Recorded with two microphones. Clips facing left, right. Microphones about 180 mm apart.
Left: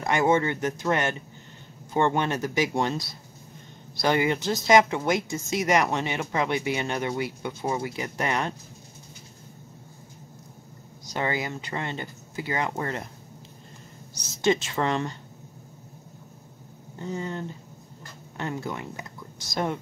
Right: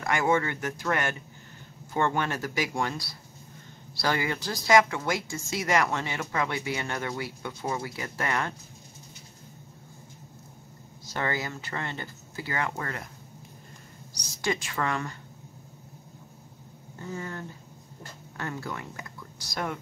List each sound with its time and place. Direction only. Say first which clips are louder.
0.0 s speech: left 3 dB; 20° left (ahead or behind)
11.1 s speech: left 3 dB; 15° left (ahead or behind)
14.1 s a woman's voice: left 7 dB; 25° left (ahead or behind)
17.0 s speech: left 5 dB; 20° left (ahead or behind)